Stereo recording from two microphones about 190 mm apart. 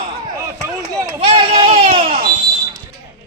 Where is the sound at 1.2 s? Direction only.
25° right (ahead or behind).